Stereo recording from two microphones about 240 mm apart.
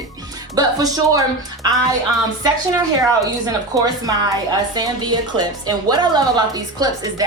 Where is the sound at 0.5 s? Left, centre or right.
Centre.